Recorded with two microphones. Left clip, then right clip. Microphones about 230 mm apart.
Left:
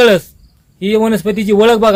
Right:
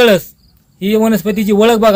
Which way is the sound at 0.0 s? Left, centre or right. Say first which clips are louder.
Even; centre.